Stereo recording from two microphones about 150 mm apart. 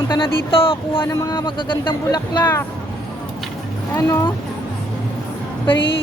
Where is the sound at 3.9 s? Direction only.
15° left (ahead or behind).